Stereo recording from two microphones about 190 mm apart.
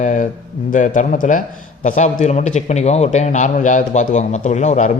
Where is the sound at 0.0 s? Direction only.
40° left (ahead or behind).